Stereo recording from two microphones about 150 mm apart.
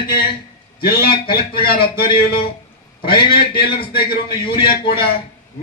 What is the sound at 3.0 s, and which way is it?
A man's voice, 90° left.